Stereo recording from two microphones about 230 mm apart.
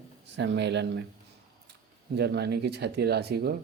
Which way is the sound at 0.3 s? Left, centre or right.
Right.